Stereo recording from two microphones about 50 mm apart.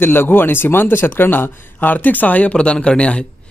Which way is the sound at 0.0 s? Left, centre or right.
Left.